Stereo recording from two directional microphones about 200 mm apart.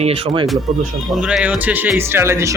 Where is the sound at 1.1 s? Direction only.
5° right (ahead or behind).